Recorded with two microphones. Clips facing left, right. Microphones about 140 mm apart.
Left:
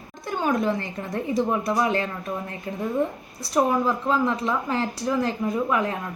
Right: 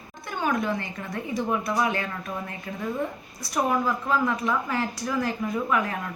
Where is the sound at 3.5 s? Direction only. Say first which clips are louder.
Left 3 dB; 25° left (ahead or behind).